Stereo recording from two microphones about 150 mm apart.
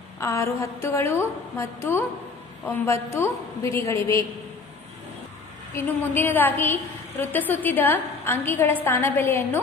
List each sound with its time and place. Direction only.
0.2 s a woman's voice: 20° left (ahead or behind)
5.8 s a woman's voice: 15° left (ahead or behind)